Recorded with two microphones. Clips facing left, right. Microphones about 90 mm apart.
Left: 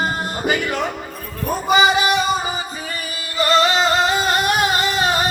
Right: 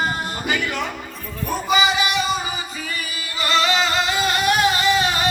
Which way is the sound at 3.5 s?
40° left (ahead or behind).